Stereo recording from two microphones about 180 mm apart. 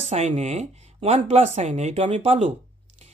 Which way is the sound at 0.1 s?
40° right (ahead or behind).